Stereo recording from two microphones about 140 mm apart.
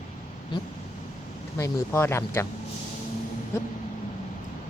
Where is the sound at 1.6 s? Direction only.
20° left (ahead or behind).